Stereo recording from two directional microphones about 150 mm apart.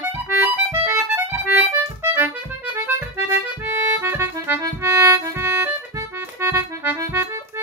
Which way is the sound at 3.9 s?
15° right (ahead or behind).